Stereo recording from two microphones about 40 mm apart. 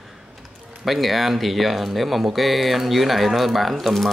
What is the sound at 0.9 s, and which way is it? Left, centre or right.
Speech, centre.